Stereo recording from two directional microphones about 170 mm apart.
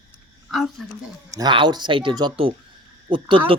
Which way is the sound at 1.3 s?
25° right (ahead or behind).